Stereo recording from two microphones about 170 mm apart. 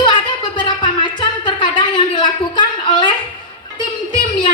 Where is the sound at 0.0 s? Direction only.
30° left (ahead or behind).